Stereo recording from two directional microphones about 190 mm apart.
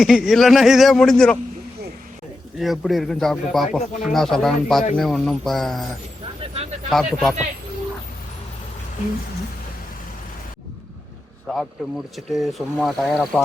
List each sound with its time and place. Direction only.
0.0 s speech: centre (ahead or behind)
2.6 s speech: centre (ahead or behind)
6.4 s vehicle: 30° right (ahead or behind)
6.9 s speech: centre (ahead or behind)
11.4 s speech: centre (ahead or behind)